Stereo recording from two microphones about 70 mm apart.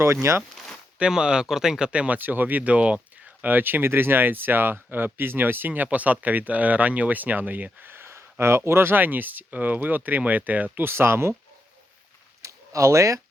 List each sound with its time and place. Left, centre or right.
0.0 s speech: right
0.9 s speech: centre
3.4 s speech: right
12.4 s a sound: right